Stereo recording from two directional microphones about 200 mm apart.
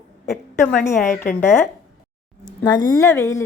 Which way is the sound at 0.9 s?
15° left (ahead or behind).